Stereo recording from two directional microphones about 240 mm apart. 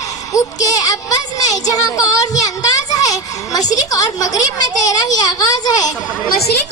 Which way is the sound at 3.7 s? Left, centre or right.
Centre.